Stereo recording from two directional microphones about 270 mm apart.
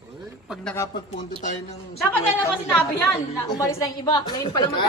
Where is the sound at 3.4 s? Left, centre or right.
Centre.